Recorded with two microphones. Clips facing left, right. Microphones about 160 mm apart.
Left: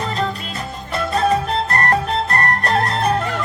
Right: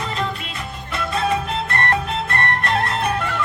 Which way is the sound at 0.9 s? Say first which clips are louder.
Left 4 dB; 40° left (ahead or behind).